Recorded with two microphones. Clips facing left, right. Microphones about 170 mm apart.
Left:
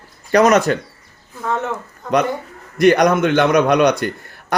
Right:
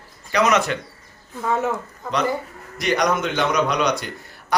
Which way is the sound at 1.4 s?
5° right (ahead or behind).